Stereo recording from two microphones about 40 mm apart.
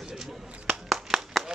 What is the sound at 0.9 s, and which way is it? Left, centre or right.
Clapping, centre.